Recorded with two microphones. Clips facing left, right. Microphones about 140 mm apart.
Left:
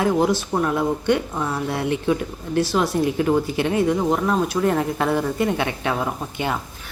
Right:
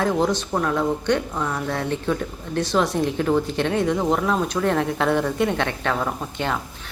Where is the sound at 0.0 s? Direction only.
10° left (ahead or behind).